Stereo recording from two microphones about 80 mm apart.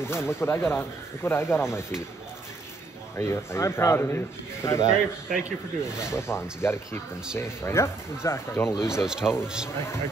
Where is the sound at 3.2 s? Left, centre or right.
Left.